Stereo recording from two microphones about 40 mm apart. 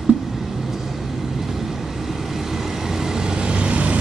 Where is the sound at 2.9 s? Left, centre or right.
Centre.